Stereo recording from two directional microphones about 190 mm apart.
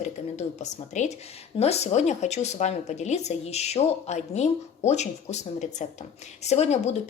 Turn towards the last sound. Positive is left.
turn(degrees=35)  # may be behind; listen again after turning